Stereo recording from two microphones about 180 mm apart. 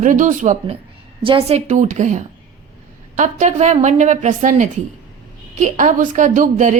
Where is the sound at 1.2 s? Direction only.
30° right (ahead or behind).